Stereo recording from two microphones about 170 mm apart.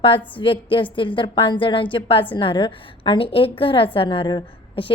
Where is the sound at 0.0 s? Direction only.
30° left (ahead or behind).